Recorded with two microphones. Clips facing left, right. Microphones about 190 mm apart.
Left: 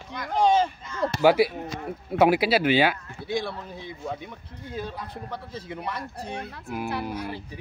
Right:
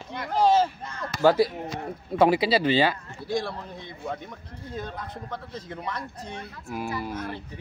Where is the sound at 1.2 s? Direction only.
10° left (ahead or behind).